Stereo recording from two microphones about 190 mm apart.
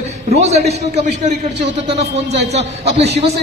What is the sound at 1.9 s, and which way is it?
A man's voice, 35° right (ahead or behind).